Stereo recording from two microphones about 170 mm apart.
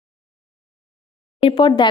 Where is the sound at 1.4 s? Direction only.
30° left (ahead or behind).